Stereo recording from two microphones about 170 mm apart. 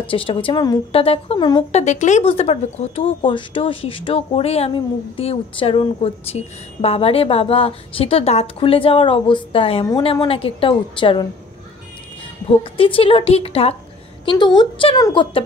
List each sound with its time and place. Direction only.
0.0 s speech: 30° left (ahead or behind)
1.7 s speech: 40° left (ahead or behind)
12.7 s speech: 30° left (ahead or behind)